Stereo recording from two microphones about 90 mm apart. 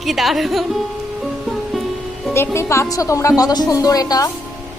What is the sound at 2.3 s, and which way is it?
A woman's voice, 30° left (ahead or behind).